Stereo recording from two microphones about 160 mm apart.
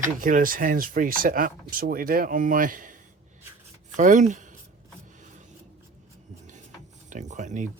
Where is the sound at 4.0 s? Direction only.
50° right (ahead or behind).